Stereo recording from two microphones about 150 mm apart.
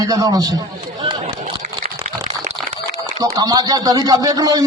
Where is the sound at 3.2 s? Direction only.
25° right (ahead or behind).